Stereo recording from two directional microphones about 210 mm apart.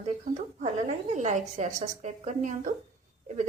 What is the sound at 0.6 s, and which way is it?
A woman's voice, 35° right (ahead or behind).